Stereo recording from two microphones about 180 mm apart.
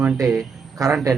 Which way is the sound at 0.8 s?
20° right (ahead or behind).